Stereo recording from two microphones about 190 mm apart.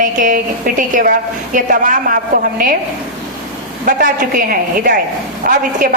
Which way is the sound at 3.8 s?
45° right (ahead or behind).